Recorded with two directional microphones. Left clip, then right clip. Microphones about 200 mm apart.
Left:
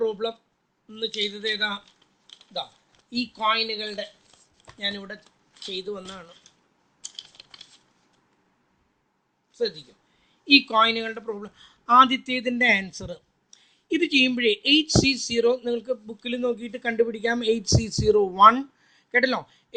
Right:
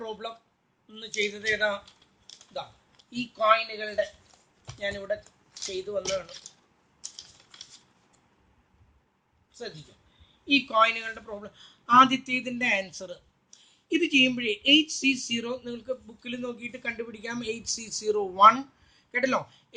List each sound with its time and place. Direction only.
0.0 s a sound: 50° left (ahead or behind)
0.9 s speech: 55° left (ahead or behind)
3.1 s speech: 50° left (ahead or behind)
10.4 s speech: 50° left (ahead or behind)